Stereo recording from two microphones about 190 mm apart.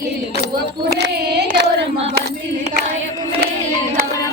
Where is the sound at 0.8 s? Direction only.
60° right (ahead or behind).